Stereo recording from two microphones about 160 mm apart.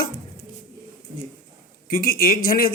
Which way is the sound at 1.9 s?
65° left (ahead or behind).